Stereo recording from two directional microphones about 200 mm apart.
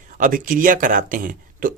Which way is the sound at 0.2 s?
40° right (ahead or behind).